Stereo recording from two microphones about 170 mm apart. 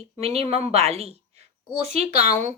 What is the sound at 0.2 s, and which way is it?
Speech, 35° right (ahead or behind).